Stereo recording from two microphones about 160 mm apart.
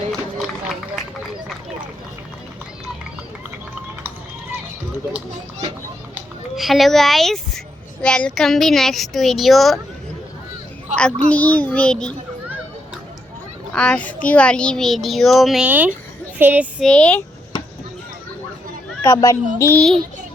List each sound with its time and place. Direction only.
0.1 s run: 5° left (ahead or behind)
6.1 s a sound: centre (ahead or behind)
8.0 s a child's voice: 5° left (ahead or behind)
10.9 s a child's voice: 10° left (ahead or behind)
13.7 s a child's voice: 5° left (ahead or behind); by 15.9 s 10° right (ahead or behind)
16.4 s child singing: 10° right (ahead or behind)
16.8 s a child's voice: 5° left (ahead or behind)
19.0 s a child's voice: 20° left (ahead or behind)